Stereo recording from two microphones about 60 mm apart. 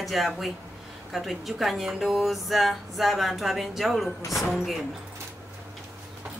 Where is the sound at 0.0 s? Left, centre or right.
Centre.